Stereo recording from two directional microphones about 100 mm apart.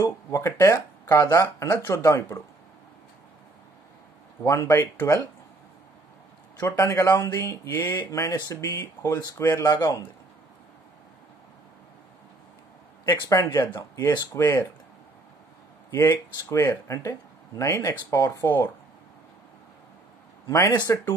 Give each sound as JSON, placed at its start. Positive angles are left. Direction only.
{"t": 0.0, "sound": "speech", "side_deg": 30}
{"t": 4.4, "sound": "speech", "side_deg": 25}
{"t": 6.6, "sound": "speech", "side_deg": 30}
{"t": 9.7, "sound": "a man's voice", "side_deg": 45}
{"t": 13.0, "sound": "speech", "side_deg": 30}
{"t": 16.4, "sound": "speech", "side_deg": 30}
{"t": 18.4, "sound": "speech", "side_deg": 20}
{"t": 20.4, "sound": "speech", "side_deg": 30}